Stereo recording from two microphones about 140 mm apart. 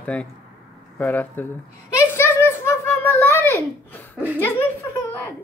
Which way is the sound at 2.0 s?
15° left (ahead or behind).